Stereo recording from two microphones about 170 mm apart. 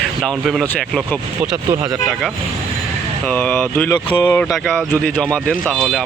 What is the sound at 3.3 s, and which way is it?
Speech, 10° left (ahead or behind).